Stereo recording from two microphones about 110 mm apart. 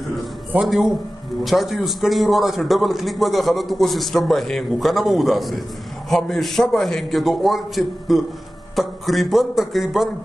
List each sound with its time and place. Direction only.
0.6 s a man's voice: 5° right (ahead or behind)